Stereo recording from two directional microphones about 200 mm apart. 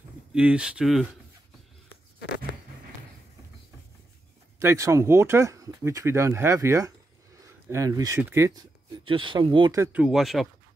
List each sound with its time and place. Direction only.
0.3 s speech: 5° right (ahead or behind)
4.6 s speech: 15° right (ahead or behind)
9.0 s speech: 25° right (ahead or behind)
9.9 s speech: 5° right (ahead or behind)